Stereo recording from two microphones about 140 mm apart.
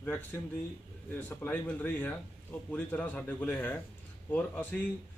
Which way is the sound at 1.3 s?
10° left (ahead or behind).